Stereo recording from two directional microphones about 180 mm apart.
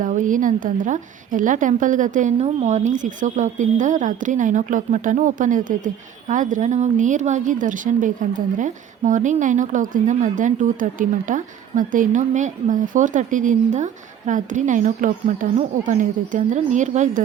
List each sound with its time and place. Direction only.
0.0 s a woman's voice: 45° right (ahead or behind)